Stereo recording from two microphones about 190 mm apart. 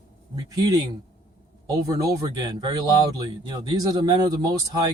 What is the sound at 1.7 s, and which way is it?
Speech, 20° right (ahead or behind).